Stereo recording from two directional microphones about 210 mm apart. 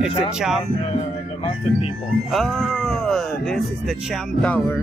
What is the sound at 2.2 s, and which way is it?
Speech, centre (ahead or behind).